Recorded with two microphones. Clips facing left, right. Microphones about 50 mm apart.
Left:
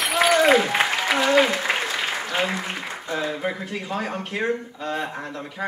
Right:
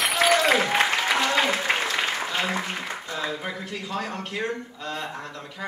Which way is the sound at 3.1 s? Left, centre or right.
Left.